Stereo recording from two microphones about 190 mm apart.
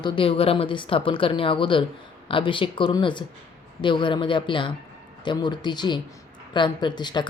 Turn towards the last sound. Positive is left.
turn(degrees=20)  # may be behind; listen again after turning